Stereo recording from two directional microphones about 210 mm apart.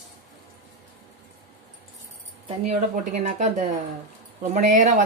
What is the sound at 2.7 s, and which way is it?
Speech, 35° right (ahead or behind).